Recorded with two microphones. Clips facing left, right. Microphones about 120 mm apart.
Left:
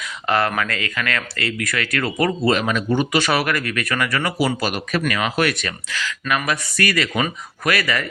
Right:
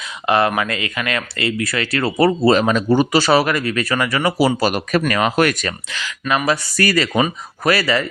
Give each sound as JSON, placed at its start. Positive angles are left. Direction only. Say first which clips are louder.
{"t": 0.3, "sound": "speech", "louder": "right 3 dB", "side_deg": -20}
{"t": 5.9, "sound": "speech", "louder": "right 2 dB", "side_deg": -20}